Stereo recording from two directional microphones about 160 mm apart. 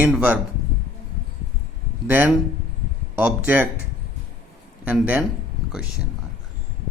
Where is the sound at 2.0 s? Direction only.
10° right (ahead or behind).